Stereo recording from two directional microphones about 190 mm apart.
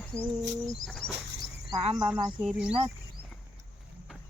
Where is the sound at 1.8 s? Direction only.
30° right (ahead or behind).